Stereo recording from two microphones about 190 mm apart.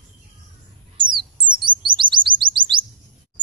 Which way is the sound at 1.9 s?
25° right (ahead or behind).